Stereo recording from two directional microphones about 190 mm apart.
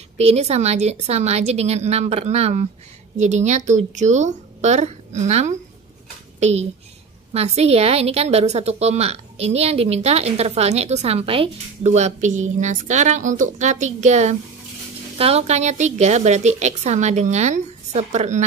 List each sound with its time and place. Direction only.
0.2 s a woman's voice: 35° right (ahead or behind)